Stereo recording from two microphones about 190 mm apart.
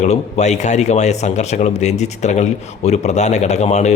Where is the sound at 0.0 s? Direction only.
35° left (ahead or behind).